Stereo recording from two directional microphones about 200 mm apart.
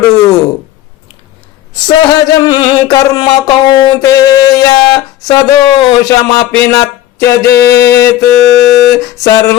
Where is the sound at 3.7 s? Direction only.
20° left (ahead or behind).